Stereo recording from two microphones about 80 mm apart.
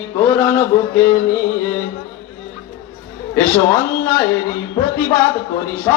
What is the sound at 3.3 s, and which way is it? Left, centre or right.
Mantra, left.